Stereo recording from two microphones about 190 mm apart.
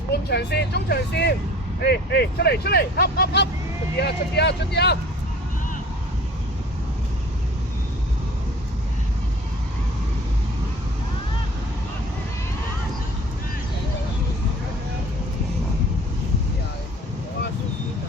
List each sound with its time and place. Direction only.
0.1 s speech: 60° left (ahead or behind)